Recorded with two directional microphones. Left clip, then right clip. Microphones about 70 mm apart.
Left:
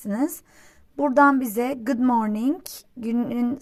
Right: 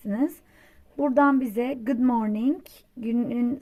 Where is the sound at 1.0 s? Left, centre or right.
Centre.